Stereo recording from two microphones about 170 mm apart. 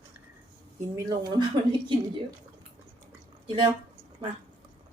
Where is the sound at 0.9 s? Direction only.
25° right (ahead or behind).